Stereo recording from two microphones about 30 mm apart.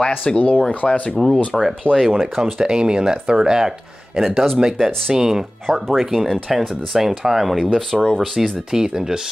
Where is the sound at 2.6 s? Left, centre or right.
Right.